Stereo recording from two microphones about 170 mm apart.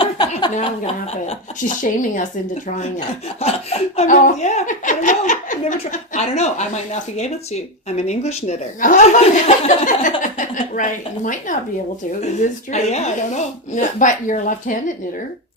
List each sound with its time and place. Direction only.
0.2 s a sound: 25° left (ahead or behind)
1.1 s speech: 45° left (ahead or behind)
3.4 s speech: 40° left (ahead or behind)